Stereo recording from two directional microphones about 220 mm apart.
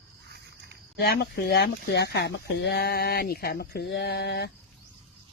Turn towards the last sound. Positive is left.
turn(degrees=45)  # may be behind; listen again after turning